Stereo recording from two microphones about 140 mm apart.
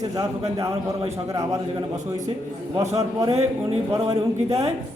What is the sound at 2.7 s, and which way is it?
A man's voice, 50° right (ahead or behind).